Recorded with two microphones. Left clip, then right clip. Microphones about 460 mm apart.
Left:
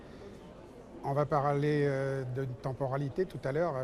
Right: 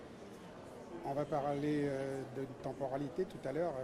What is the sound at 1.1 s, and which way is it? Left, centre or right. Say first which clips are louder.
Speech: left 7 dB; left.